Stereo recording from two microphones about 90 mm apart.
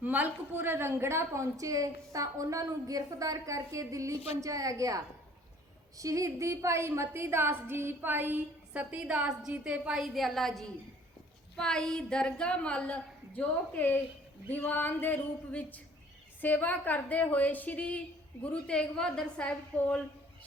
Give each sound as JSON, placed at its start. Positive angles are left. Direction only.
{"t": 0.0, "sound": "a woman's voice", "side_deg": -20}
{"t": 4.1, "sound": "a woman's voice", "side_deg": 90}
{"t": 4.4, "sound": "a woman's voice", "side_deg": -40}
{"t": 16.4, "sound": "a woman's voice", "side_deg": 20}